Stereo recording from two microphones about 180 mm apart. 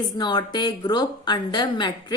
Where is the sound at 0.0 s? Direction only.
25° left (ahead or behind).